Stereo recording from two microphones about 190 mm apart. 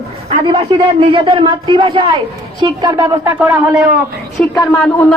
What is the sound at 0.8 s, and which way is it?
A man's voice, 25° right (ahead or behind).